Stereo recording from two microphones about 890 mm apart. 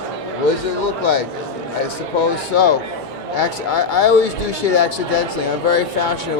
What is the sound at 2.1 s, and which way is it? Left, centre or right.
Speech, left.